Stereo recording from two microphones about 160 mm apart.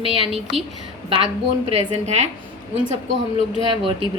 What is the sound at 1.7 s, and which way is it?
Speech, 45° right (ahead or behind).